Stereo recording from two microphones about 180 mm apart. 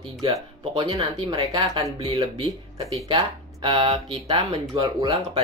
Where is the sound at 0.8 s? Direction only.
30° right (ahead or behind).